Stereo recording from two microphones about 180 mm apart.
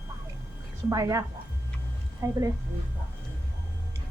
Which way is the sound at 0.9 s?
20° right (ahead or behind).